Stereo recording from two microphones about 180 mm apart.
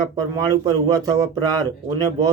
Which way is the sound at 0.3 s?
20° right (ahead or behind).